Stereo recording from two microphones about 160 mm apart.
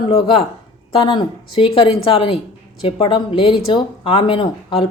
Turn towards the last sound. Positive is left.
turn(degrees=30)  # may be behind; listen again after turning